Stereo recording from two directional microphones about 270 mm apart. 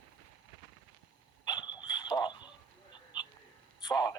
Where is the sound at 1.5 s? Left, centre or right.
Centre.